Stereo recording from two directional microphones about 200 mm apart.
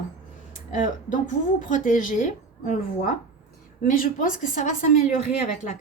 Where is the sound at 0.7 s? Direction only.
40° left (ahead or behind).